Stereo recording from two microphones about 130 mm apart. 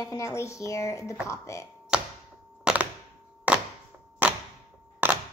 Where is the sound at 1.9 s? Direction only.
5° right (ahead or behind).